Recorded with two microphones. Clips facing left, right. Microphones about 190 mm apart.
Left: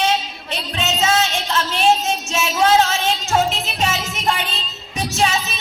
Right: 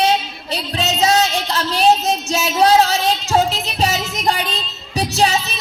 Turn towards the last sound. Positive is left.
turn(degrees=-35)  # may be behind; listen again after turning